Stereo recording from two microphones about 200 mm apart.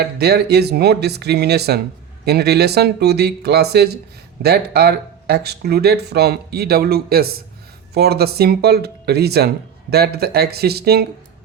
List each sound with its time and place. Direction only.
0.0 s speech: 55° right (ahead or behind)